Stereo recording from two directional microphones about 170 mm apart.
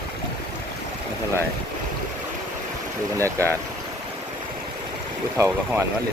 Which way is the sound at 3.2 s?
15° right (ahead or behind).